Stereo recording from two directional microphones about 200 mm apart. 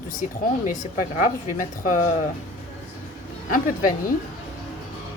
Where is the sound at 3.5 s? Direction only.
40° left (ahead or behind).